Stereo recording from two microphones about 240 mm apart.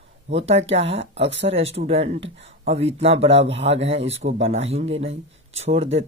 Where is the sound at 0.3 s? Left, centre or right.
Right.